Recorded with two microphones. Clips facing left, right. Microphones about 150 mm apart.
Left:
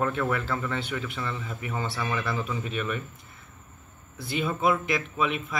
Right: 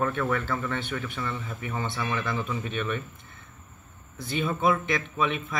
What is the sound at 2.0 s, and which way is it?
Speech, 20° right (ahead or behind).